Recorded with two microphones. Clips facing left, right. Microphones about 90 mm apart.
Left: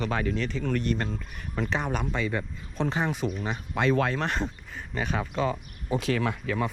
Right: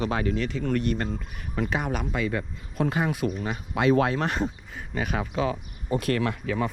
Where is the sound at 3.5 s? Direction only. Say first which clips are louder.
Right 3 dB; 50° right (ahead or behind).